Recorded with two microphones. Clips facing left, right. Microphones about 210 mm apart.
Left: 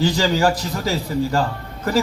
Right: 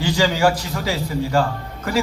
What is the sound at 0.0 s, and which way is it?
A man's voice, 40° left (ahead or behind).